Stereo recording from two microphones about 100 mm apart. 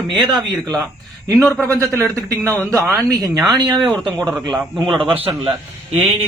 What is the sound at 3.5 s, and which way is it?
Speech, 45° right (ahead or behind).